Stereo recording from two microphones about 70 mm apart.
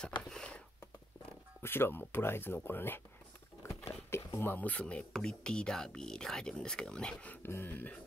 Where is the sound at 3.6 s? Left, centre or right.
Left.